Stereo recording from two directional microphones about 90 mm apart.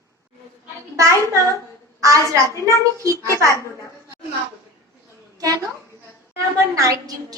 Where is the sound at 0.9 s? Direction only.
35° right (ahead or behind).